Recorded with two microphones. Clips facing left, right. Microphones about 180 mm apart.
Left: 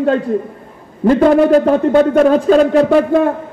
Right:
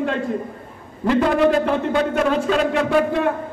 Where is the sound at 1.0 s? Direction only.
40° left (ahead or behind).